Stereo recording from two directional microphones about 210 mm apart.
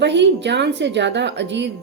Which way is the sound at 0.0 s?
55° right (ahead or behind).